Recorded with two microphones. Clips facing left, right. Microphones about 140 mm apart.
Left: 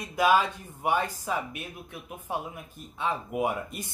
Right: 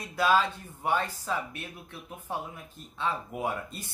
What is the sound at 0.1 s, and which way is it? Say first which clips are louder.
Speech: left 2 dB; 15° left (ahead or behind).